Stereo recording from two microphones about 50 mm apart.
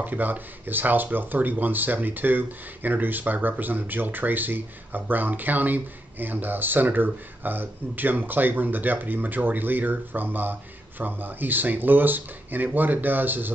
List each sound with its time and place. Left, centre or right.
0.0 s speech: right